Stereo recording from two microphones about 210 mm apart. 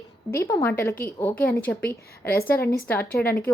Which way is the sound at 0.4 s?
15° left (ahead or behind).